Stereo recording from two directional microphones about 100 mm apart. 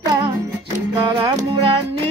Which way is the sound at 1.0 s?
45° right (ahead or behind).